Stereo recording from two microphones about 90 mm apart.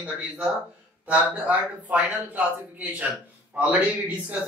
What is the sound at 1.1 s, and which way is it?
Speech, 15° right (ahead or behind).